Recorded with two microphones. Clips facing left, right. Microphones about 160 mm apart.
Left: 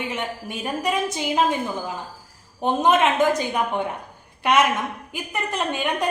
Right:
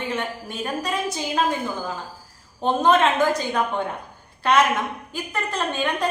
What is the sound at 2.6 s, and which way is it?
A woman's voice, 15° left (ahead or behind).